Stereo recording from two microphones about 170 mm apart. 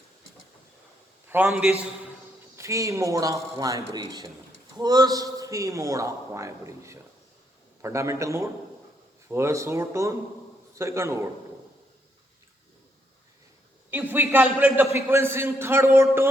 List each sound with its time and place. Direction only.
1.3 s a man's voice: 5° right (ahead or behind)
2.6 s a man's voice: 15° right (ahead or behind)
13.9 s a man's voice: 15° right (ahead or behind)